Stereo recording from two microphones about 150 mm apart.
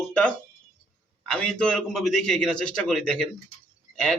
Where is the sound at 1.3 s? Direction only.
5° left (ahead or behind).